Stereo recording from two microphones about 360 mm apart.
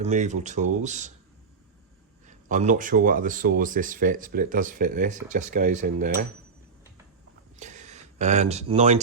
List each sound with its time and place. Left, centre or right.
0.0 s speech: centre
2.2 s speech: centre
7.6 s speech: centre